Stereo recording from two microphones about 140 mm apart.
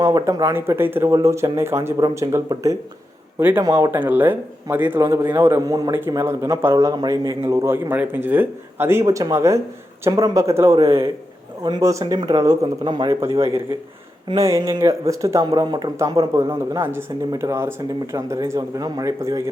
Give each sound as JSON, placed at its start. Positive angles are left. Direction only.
{"t": 0.0, "sound": "speech", "side_deg": -25}
{"t": 13.1, "sound": "speech", "side_deg": -20}